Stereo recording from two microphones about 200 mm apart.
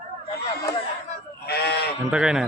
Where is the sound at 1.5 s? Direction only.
55° left (ahead or behind).